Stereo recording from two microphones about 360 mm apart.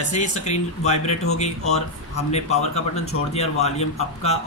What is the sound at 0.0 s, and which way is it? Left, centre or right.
Speech, centre.